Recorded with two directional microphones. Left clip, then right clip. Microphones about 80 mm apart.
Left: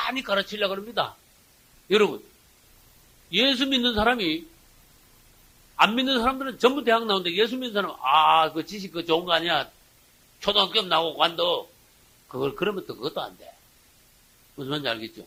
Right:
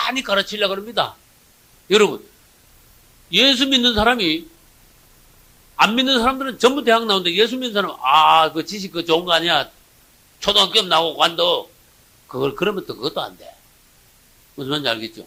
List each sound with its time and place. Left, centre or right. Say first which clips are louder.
0.0 s a man's voice: right 6 dB; left
3.2 s a man's voice: right 7 dB; left
5.7 s a man's voice: right 5 dB; left
14.5 s a man's voice: right 7 dB; left